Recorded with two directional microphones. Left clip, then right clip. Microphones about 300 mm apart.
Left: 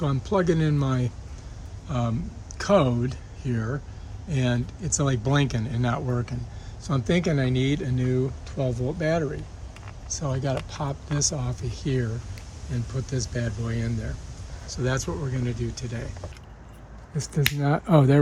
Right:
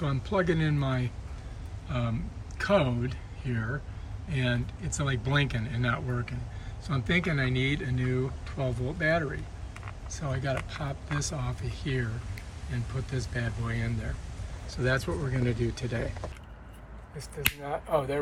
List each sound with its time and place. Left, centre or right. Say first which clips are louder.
0.0 s speech: left 4 dB; centre
17.7 s speech: left 10 dB; left